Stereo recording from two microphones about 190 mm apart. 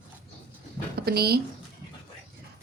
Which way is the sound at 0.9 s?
55° right (ahead or behind).